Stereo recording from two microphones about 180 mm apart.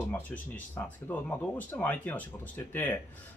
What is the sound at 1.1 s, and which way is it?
Speech, 10° left (ahead or behind).